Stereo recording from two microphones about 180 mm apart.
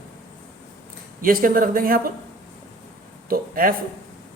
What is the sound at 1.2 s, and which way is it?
Speech, 50° right (ahead or behind).